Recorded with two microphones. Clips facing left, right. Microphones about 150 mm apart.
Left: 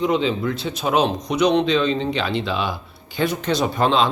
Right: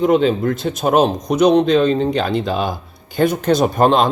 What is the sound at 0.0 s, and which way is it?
A man's voice, 50° right (ahead or behind).